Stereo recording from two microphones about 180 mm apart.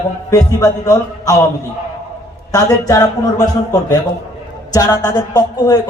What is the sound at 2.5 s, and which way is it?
A man's voice, 20° left (ahead or behind).